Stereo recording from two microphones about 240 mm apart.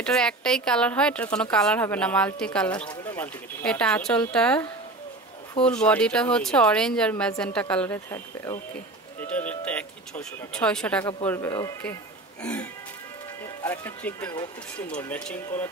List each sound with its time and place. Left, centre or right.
0.0 s speech: centre
13.6 s speech: centre